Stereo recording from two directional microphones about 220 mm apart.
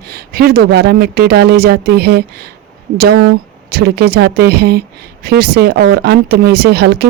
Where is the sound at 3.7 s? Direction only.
45° right (ahead or behind).